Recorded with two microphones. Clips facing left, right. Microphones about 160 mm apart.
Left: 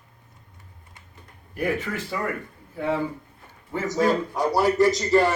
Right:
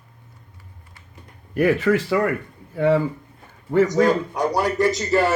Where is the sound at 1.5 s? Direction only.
80° right.